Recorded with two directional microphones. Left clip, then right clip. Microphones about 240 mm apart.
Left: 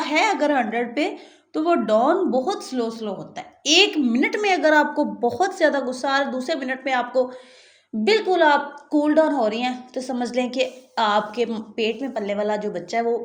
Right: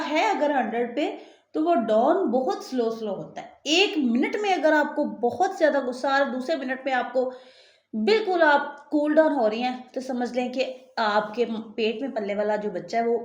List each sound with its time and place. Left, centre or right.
0.0 s a woman's voice: left